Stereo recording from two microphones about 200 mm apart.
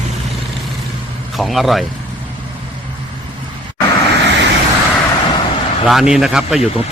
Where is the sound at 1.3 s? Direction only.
Centre (ahead or behind).